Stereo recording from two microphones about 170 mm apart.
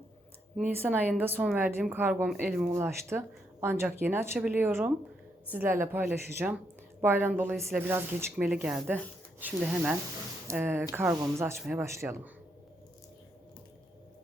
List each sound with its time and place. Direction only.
0.8 s a woman's voice: 5° right (ahead or behind)